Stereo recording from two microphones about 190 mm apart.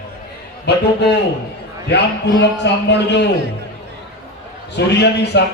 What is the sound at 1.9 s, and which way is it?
A man's voice, 65° left (ahead or behind).